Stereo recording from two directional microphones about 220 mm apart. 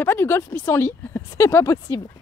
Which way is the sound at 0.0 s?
10° left (ahead or behind).